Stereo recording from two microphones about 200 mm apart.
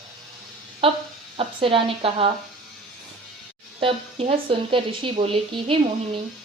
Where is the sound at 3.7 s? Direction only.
30° right (ahead or behind).